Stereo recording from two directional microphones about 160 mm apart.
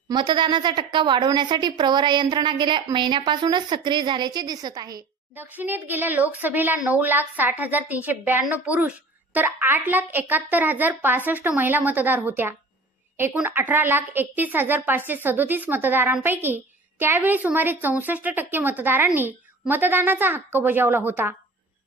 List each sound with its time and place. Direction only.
0.1 s a woman's voice: 30° right (ahead or behind)
5.3 s speech: 10° right (ahead or behind)